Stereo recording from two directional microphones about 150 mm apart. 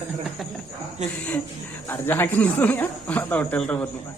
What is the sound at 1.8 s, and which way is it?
Speech, 15° left (ahead or behind).